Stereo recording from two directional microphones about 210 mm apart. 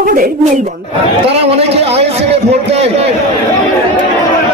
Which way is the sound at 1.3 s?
30° right (ahead or behind).